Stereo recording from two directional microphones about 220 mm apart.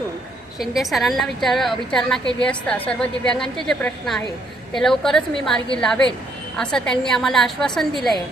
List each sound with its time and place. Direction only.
0.6 s a woman's voice: centre (ahead or behind)